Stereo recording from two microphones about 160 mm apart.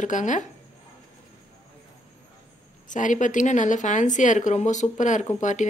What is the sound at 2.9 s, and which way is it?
A woman's voice, 50° left (ahead or behind).